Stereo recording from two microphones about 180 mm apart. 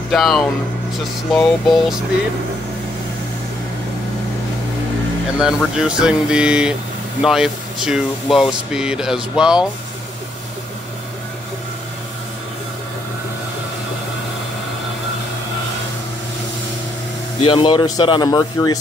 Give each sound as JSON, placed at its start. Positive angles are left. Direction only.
{"t": 0.1, "sound": "speech", "side_deg": 0}
{"t": 5.8, "sound": "speech", "side_deg": -5}
{"t": 17.4, "sound": "speech", "side_deg": 30}